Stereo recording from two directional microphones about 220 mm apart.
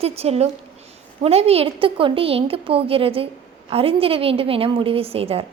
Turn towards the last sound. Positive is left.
turn(degrees=-25)  # may be behind; listen again after turning